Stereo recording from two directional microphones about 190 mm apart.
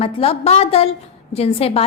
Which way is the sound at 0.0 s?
30° left (ahead or behind).